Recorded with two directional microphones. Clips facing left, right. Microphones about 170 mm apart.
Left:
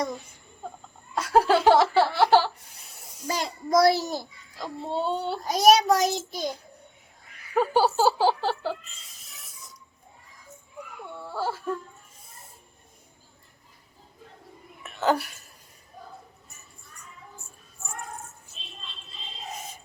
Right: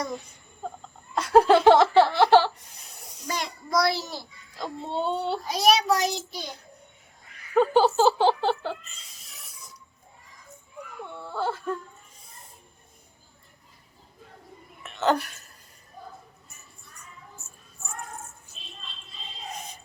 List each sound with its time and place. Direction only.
1.1 s laughter: 5° left (ahead or behind)
3.2 s child singing: 30° left (ahead or behind)
3.7 s a child's voice: 45° left (ahead or behind)
4.5 s speech: 5° left (ahead or behind)
5.5 s a child's voice: 45° left (ahead or behind)
7.5 s a sound: 10° left (ahead or behind)
11.1 s speech: 10° left (ahead or behind)
14.8 s speech: 10° left (ahead or behind)
17.4 s child singing: 20° right (ahead or behind)